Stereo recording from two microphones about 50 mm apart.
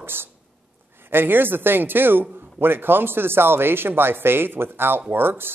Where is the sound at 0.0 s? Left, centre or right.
Right.